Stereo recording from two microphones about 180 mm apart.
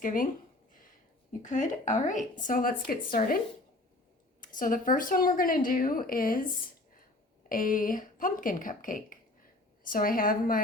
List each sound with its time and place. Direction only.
0.0 s speech: 50° left (ahead or behind)
1.4 s speech: 45° left (ahead or behind)